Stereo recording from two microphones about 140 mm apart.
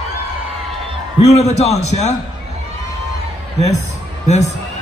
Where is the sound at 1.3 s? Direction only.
50° left (ahead or behind).